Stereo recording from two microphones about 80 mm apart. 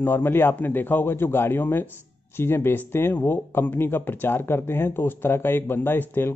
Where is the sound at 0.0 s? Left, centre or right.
Left.